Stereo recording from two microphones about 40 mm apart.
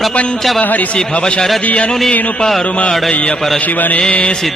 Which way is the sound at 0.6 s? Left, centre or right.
Left.